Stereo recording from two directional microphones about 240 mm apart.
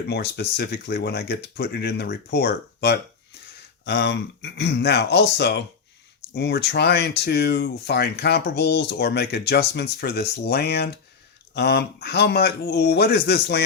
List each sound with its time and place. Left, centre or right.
0.1 s speech: left